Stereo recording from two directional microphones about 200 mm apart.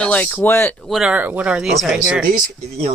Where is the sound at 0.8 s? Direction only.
Centre (ahead or behind).